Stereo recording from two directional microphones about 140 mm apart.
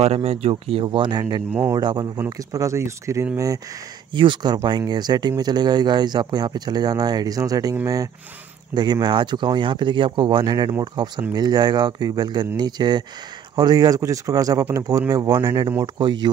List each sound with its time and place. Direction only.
0.0 s speech: 50° right (ahead or behind); by 3.3 s 20° right (ahead or behind)
4.1 s speech: 35° right (ahead or behind)